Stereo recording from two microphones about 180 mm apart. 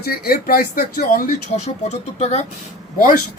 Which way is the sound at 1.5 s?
40° left (ahead or behind).